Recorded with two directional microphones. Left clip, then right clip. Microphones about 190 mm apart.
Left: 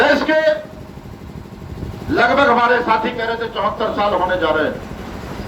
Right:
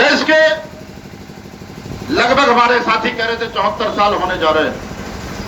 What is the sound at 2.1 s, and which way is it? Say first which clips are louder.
A man's voice: right 2 dB; 35° left (ahead or behind).